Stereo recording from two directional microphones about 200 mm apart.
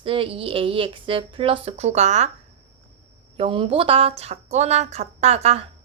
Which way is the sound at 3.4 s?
25° right (ahead or behind).